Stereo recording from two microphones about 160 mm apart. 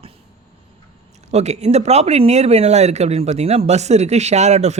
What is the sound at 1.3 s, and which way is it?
Speech, 45° right (ahead or behind).